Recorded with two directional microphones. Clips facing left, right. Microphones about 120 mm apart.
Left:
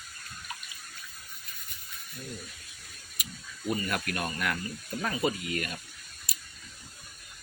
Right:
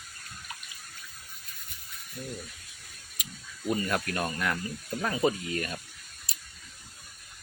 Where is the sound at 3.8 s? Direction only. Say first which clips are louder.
Right 2 dB; 25° right (ahead or behind).